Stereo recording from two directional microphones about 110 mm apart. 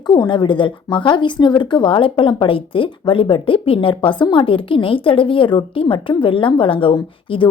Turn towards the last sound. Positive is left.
turn(degrees=50)  # may be behind; listen again after turning